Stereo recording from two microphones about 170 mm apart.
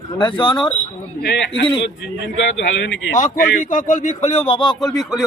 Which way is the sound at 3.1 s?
50° left (ahead or behind).